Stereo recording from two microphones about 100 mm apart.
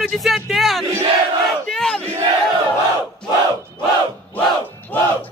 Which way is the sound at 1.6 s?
5° left (ahead or behind).